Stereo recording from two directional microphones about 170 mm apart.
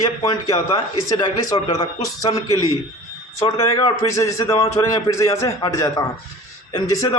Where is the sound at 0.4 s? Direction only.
20° left (ahead or behind).